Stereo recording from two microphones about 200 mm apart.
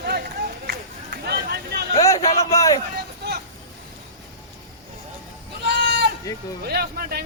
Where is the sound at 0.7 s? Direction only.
55° right (ahead or behind).